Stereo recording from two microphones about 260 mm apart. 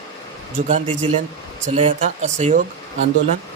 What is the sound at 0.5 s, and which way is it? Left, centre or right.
Speech, right.